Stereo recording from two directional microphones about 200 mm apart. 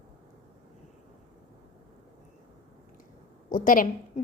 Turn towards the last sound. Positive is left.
turn(degrees=45)  # may be behind; listen again after turning